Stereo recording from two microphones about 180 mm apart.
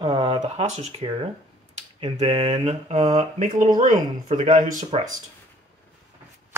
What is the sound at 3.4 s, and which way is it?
Speech, 50° right (ahead or behind).